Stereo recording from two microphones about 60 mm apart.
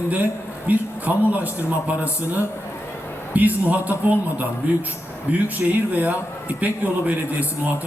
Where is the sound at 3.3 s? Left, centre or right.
Right.